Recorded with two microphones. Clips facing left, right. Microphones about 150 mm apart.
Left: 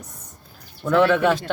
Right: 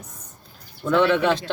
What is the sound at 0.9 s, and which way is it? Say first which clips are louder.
Speech: left 1 dB; 5° left (ahead or behind).